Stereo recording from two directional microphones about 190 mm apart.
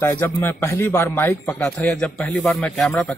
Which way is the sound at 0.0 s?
10° left (ahead or behind).